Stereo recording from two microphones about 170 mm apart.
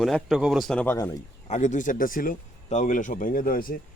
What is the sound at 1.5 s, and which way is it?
Speech, 45° left (ahead or behind).